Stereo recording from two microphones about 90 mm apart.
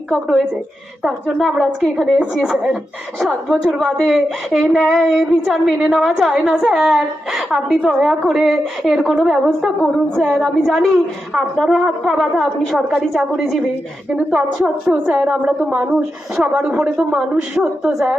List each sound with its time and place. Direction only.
0.1 s a woman's voice: centre (ahead or behind)